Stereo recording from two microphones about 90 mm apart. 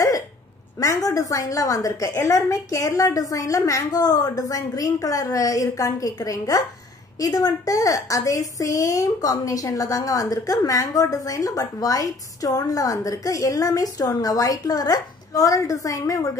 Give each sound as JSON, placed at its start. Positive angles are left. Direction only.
{"t": 0.7, "sound": "a woman's voice", "side_deg": 40}